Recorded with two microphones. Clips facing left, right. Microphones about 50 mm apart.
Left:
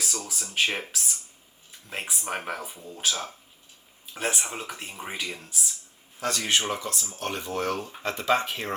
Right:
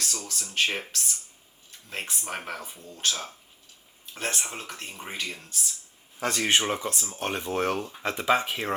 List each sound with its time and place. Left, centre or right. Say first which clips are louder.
0.0 s speech: left 1 dB; centre
6.1 s speech: right 2 dB; right
8.0 s speech: even; centre